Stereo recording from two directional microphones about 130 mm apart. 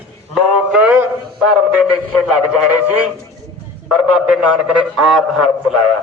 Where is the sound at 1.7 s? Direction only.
5° right (ahead or behind).